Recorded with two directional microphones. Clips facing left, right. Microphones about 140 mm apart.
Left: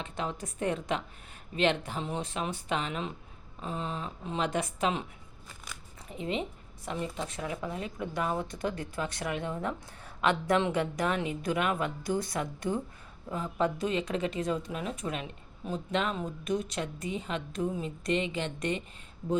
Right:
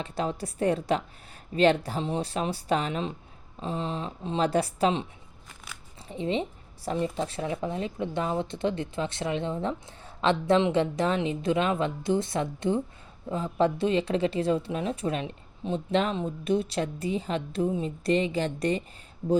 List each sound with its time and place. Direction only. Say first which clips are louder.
0.0 s speech: right 5 dB; 35° right (ahead or behind)
6.1 s speech: right 5 dB; 30° right (ahead or behind)